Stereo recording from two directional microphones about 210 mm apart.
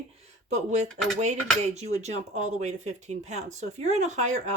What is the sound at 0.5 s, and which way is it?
Speech, 35° right (ahead or behind).